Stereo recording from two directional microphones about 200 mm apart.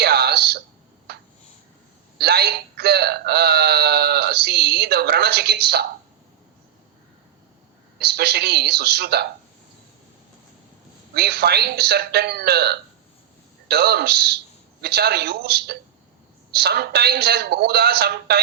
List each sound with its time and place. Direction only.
0.0 s a sound: 50° right (ahead or behind)
2.1 s speech: 55° right (ahead or behind)
7.9 s speech: 55° right (ahead or behind)
11.1 s speech: 55° right (ahead or behind)